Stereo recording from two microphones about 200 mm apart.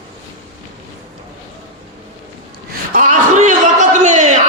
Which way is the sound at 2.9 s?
40° right (ahead or behind).